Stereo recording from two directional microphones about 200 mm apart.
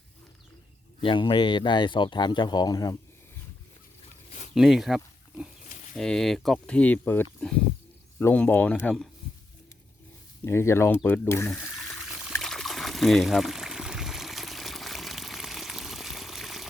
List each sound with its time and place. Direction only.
1.0 s speech: 25° left (ahead or behind)
4.5 s speech: centre (ahead or behind)
10.4 s speech: 15° left (ahead or behind)
12.4 s trickle: centre (ahead or behind)